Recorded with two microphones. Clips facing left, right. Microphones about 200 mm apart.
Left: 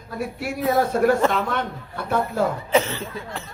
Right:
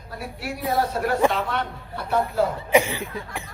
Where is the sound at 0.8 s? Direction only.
50° left (ahead or behind).